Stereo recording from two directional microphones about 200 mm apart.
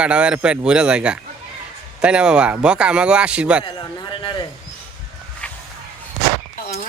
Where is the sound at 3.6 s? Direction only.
25° left (ahead or behind).